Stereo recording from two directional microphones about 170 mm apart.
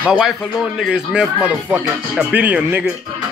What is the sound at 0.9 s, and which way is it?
A man's voice, 5° right (ahead or behind).